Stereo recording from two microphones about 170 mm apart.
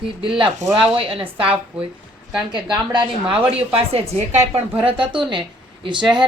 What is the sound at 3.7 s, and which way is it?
A woman's voice, 35° right (ahead or behind).